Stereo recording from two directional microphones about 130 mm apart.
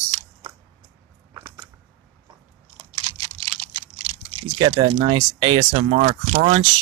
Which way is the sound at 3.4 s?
50° right (ahead or behind).